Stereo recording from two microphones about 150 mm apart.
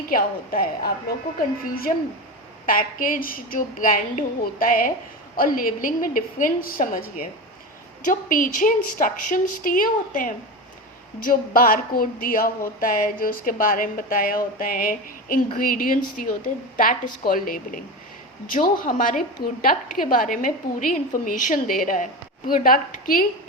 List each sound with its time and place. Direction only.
0.1 s a woman's voice: 75° left (ahead or behind)